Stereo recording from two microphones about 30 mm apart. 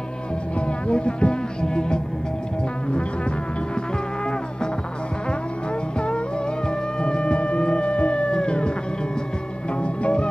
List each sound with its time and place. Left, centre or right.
0.6 s music: left
5.9 s music: left
9.8 s music: left